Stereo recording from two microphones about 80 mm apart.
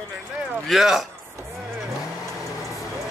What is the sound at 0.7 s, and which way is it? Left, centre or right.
Speech, centre.